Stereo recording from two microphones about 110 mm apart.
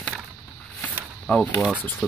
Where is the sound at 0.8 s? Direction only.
10° left (ahead or behind).